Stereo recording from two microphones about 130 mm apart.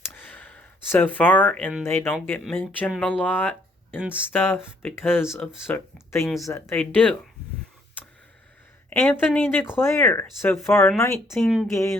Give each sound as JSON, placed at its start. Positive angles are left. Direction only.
{"t": 0.1, "sound": "a sound", "side_deg": 15}
{"t": 1.8, "sound": "speech", "side_deg": 15}
{"t": 8.9, "sound": "speech", "side_deg": 15}
{"t": 11.3, "sound": "a woman's voice", "side_deg": 0}
{"t": 11.7, "sound": "speech", "side_deg": 20}